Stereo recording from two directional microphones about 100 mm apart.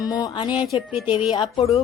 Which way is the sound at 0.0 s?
40° left (ahead or behind).